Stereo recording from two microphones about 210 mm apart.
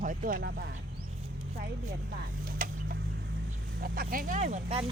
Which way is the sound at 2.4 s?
40° right (ahead or behind).